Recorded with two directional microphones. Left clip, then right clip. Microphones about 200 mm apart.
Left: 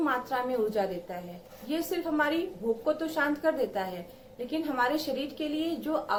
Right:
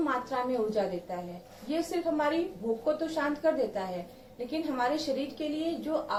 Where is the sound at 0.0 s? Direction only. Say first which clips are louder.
Left 1 dB; 15° left (ahead or behind).